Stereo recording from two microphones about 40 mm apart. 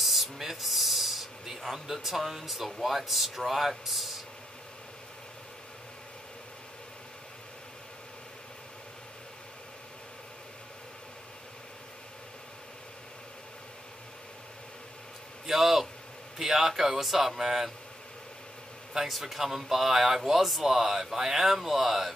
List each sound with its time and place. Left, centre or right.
0.0 s speech: centre
15.4 s a sound: centre
16.3 s speech: centre
18.9 s speech: centre